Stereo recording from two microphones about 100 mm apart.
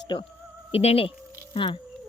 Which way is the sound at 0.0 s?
55° left (ahead or behind).